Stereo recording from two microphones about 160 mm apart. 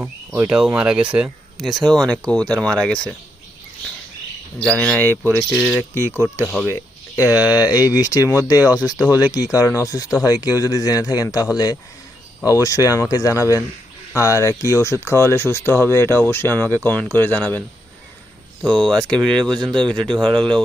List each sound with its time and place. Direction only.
0.0 s speech: 5° right (ahead or behind)
4.6 s speech: 5° left (ahead or behind)
5.9 s speech: 15° left (ahead or behind)
6.4 s speech: centre (ahead or behind)
6.7 s speech: 15° left (ahead or behind)
8.7 s speech: 10° right (ahead or behind)
9.3 s speech: 20° left (ahead or behind)
18.6 s speech: 5° left (ahead or behind)
20.2 s speech: 30° right (ahead or behind)